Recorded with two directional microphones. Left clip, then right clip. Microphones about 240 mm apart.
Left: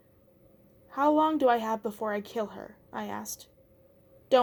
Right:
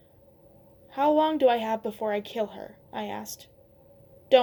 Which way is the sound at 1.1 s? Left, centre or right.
Left.